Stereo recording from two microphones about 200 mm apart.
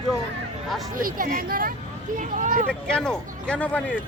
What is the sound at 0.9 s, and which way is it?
Speech, 45° right (ahead or behind).